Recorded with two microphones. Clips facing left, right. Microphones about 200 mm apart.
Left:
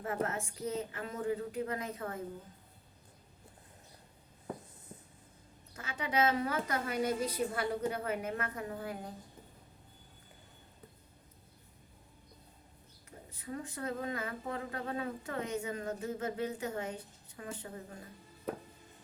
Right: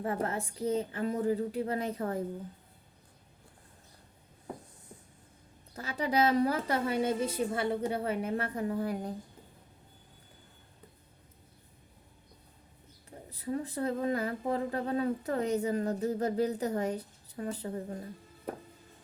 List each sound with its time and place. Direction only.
0.0 s speech: 30° right (ahead or behind)
5.7 s speech: 35° right (ahead or behind)
13.1 s speech: 35° right (ahead or behind)